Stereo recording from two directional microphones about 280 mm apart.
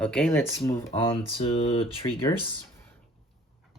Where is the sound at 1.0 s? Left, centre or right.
Centre.